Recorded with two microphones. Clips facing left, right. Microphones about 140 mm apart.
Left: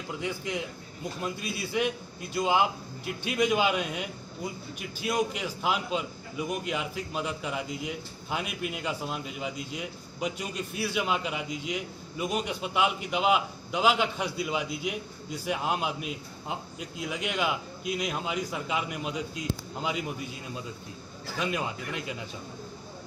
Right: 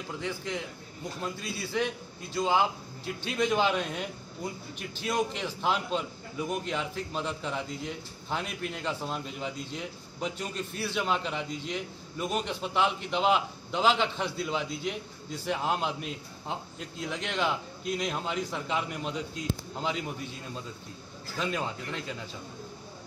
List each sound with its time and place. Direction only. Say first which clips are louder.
0.2 s a man's voice: left 2 dB; 10° left (ahead or behind)